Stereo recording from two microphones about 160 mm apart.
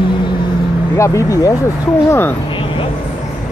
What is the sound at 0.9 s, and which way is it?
Speech, 20° left (ahead or behind).